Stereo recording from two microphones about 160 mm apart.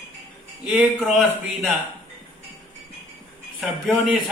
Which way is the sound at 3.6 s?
5° right (ahead or behind).